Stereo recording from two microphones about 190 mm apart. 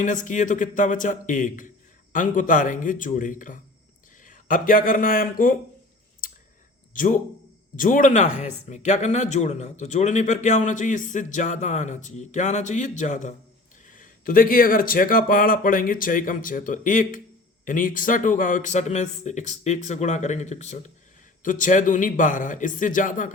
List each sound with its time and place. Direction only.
0.0 s speech: 40° left (ahead or behind)
6.9 s speech: 45° left (ahead or behind)